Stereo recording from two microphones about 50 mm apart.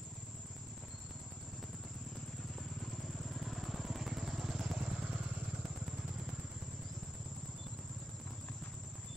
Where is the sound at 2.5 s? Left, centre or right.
Centre.